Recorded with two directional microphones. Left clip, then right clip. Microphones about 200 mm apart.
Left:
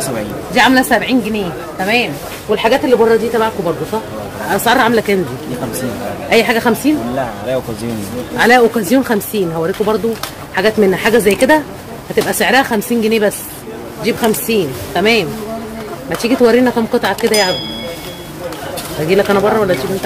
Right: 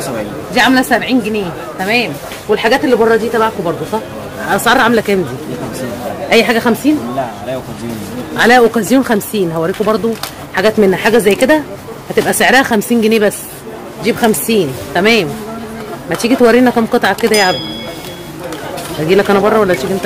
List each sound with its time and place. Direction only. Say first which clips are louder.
0.6 s a woman's voice: even; 5° right (ahead or behind)
6.2 s speech: right 1 dB; 20° right (ahead or behind)
8.4 s speech: right 1 dB; 20° right (ahead or behind)
12.2 s speech: right 2 dB; 30° right (ahead or behind)
19.0 s speech: right 2 dB; 25° right (ahead or behind)